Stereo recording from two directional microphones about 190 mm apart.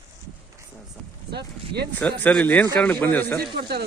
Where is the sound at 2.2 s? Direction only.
5° left (ahead or behind).